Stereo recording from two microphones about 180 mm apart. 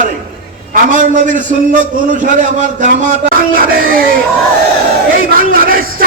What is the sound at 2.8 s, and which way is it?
Speech, 45° right (ahead or behind).